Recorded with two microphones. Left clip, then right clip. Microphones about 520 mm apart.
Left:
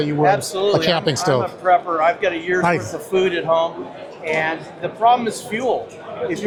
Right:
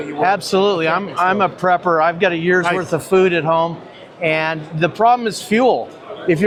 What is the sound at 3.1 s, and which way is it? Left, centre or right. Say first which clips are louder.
Speech: right 3 dB; right.